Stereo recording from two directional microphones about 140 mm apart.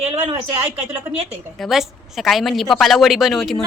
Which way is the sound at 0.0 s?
45° right (ahead or behind).